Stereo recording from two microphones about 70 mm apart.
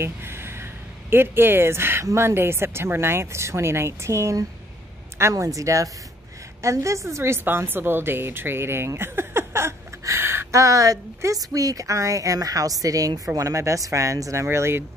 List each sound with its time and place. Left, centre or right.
0.0 s a sound: right
1.1 s a woman's voice: right
10.5 s a woman's voice: right